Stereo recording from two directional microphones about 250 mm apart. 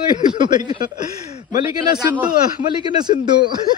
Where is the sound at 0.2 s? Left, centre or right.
Centre.